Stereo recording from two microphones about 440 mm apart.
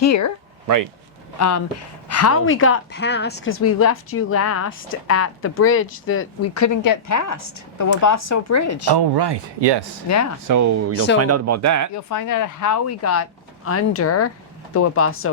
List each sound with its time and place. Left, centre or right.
0.0 s speech: left
1.4 s a woman's voice: left
8.9 s speech: right
10.1 s speech: left
10.5 s speech: right
11.9 s speech: left